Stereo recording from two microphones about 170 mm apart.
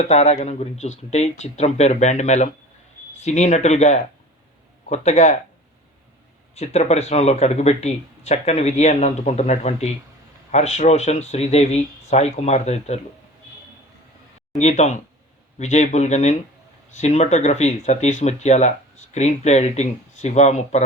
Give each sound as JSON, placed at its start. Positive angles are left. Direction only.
{"t": 0.0, "sound": "speech", "side_deg": 40}
{"t": 6.6, "sound": "speech", "side_deg": 40}
{"t": 14.6, "sound": "speech", "side_deg": 45}